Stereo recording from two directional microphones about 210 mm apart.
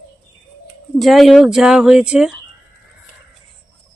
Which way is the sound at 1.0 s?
Centre (ahead or behind).